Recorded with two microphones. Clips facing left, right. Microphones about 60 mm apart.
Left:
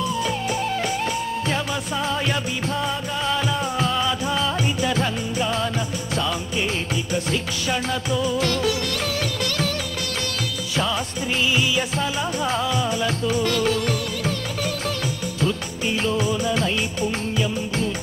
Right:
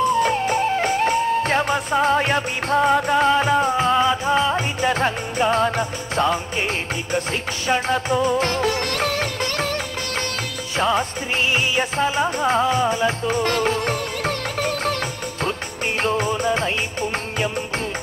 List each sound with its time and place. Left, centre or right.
0.0 s music: right
3.3 s music: right
7.6 s music: right
10.8 s music: right
16.0 s music: right